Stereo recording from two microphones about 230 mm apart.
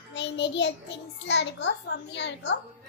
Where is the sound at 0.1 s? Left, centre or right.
Left.